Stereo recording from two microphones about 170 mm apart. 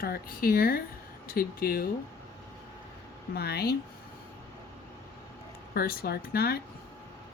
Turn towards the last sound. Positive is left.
turn(degrees=65)  # may be behind; listen again after turning